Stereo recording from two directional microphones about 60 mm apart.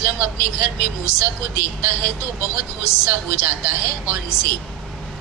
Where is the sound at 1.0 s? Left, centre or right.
Left.